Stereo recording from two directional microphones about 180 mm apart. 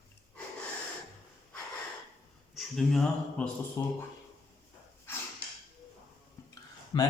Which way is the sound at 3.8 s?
15° left (ahead or behind).